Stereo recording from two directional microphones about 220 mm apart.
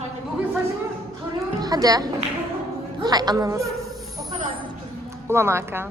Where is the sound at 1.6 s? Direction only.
15° right (ahead or behind).